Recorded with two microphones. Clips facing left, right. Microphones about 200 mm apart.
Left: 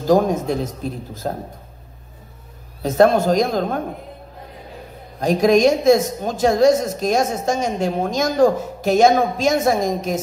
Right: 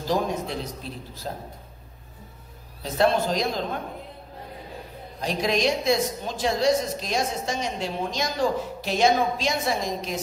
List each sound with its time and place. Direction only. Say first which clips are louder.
0.0 s a woman's voice: left 9 dB; 45° left (ahead or behind)
2.8 s a woman's voice: left 8 dB; 45° left (ahead or behind)
5.2 s a woman's voice: left 10 dB; 45° left (ahead or behind)